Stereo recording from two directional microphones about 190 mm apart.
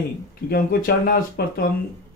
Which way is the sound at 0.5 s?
50° left (ahead or behind).